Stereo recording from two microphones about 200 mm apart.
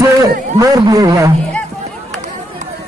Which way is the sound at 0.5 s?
15° right (ahead or behind).